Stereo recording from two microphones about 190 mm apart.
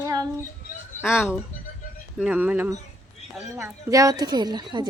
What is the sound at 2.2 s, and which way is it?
Child singing, 5° right (ahead or behind).